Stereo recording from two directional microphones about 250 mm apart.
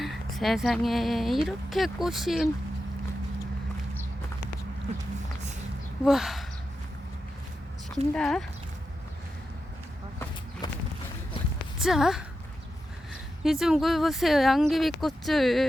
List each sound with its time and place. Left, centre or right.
0.0 s speech: centre
6.1 s speech: centre
7.9 s speech: centre
10.6 s a sound: centre
11.8 s speech: centre
13.4 s speech: centre